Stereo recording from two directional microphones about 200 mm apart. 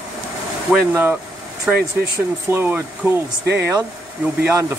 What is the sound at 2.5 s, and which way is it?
Speech, 10° right (ahead or behind).